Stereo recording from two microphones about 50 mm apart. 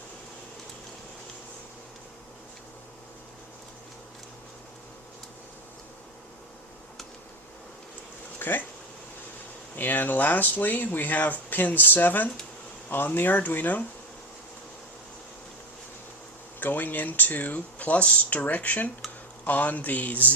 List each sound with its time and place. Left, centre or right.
8.4 s bee: left
9.7 s speech: left
16.6 s speech: left